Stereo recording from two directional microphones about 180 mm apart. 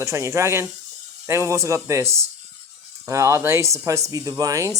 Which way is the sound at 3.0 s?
15° right (ahead or behind).